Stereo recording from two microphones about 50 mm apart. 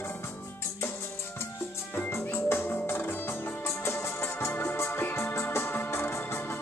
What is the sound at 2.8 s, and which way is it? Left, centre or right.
Organ, left.